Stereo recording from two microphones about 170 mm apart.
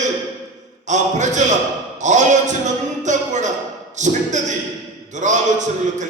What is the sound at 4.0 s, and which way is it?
Speech, 45° right (ahead or behind).